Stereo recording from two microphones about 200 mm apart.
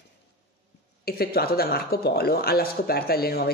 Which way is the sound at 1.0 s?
50° left (ahead or behind).